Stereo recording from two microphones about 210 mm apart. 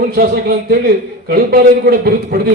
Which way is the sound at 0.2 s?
45° right (ahead or behind).